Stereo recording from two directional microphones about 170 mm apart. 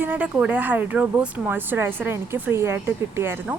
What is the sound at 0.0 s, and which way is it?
Speech, 10° right (ahead or behind).